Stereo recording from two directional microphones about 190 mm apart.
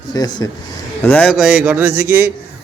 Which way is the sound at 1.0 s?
10° left (ahead or behind).